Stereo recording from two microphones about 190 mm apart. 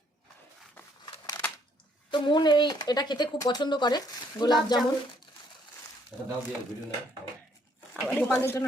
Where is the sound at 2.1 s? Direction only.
25° left (ahead or behind).